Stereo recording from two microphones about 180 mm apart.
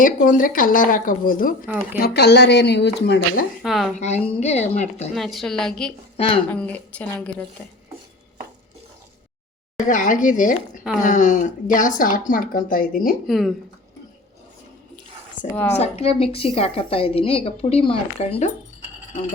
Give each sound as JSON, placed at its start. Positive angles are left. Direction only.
{"t": 0.0, "sound": "a woman's voice", "side_deg": 50}
{"t": 1.6, "sound": "speech", "side_deg": -10}
{"t": 2.0, "sound": "speech", "side_deg": 65}
{"t": 3.6, "sound": "a woman's voice", "side_deg": 0}
{"t": 3.9, "sound": "a woman's voice", "side_deg": 40}
{"t": 5.1, "sound": "a woman's voice", "side_deg": 0}
{"t": 6.1, "sound": "speech", "side_deg": 30}
{"t": 6.5, "sound": "a woman's voice", "side_deg": 10}
{"t": 9.7, "sound": "a woman's voice", "side_deg": 45}
{"t": 13.2, "sound": "a woman's voice", "side_deg": 0}
{"t": 15.8, "sound": "a woman's voice", "side_deg": 35}